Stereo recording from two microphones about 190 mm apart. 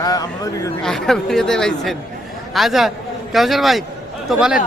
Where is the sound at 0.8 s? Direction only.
Centre (ahead or behind).